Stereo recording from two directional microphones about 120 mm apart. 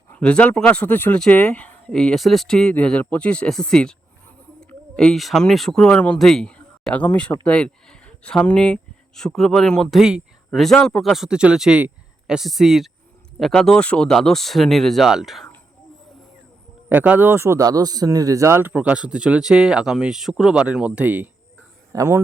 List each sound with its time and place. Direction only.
0.1 s a man's voice: 10° left (ahead or behind)
10.0 s speech: 5° right (ahead or behind)
16.9 s a man's voice: 15° right (ahead or behind)